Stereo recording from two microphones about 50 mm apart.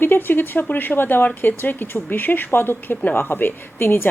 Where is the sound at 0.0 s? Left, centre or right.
Left.